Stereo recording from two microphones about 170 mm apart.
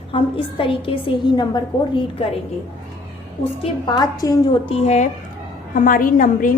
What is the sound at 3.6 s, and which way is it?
Speech, 25° left (ahead or behind).